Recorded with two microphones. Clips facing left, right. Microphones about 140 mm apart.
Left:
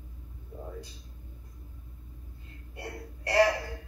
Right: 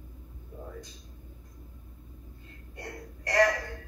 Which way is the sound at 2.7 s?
10° left (ahead or behind).